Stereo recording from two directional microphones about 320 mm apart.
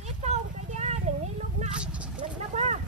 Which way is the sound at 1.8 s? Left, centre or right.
Centre.